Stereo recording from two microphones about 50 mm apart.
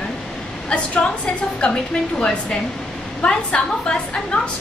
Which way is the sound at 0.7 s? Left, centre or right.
Left.